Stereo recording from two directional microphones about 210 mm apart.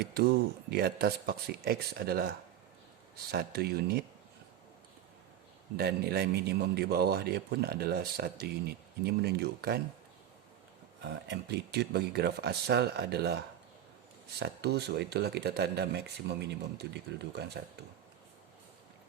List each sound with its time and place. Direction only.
0.0 s a man's voice: 50° right (ahead or behind)
3.3 s a man's voice: 50° right (ahead or behind)
5.7 s a man's voice: 50° right (ahead or behind)
11.0 s a man's voice: 55° right (ahead or behind)